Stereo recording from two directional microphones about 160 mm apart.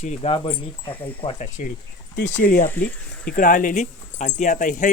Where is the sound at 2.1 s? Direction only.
75° left (ahead or behind).